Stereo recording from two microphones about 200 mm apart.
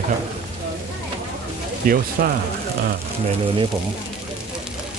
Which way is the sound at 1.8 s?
45° right (ahead or behind).